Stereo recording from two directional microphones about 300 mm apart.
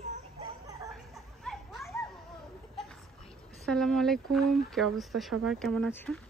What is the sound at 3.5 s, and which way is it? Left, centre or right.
Speech, centre.